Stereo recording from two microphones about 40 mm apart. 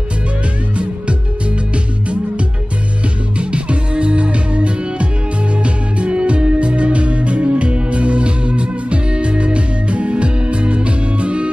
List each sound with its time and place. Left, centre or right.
3.3 s music: right